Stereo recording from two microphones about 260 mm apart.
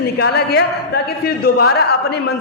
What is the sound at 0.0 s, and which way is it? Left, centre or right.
A woman's voice, left.